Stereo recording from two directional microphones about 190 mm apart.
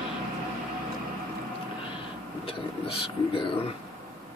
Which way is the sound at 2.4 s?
30° left (ahead or behind).